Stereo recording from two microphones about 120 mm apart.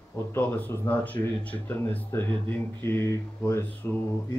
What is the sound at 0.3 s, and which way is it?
A man's voice, 15° left (ahead or behind).